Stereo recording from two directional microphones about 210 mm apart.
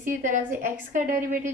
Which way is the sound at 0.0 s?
40° right (ahead or behind).